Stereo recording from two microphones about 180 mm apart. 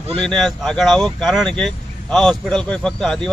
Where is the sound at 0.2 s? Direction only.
5° left (ahead or behind).